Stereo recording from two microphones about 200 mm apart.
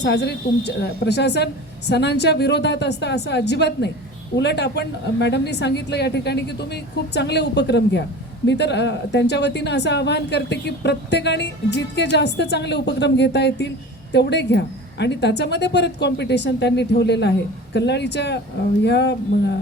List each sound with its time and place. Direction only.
0.0 s speech: 60° left (ahead or behind)